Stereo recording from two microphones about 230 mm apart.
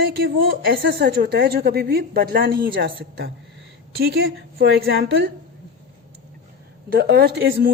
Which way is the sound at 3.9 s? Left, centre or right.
Right.